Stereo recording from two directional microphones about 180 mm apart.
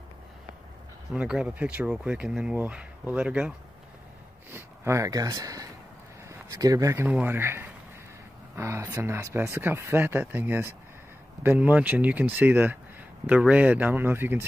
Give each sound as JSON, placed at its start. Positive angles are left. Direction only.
{"t": 1.1, "sound": "speech", "side_deg": -5}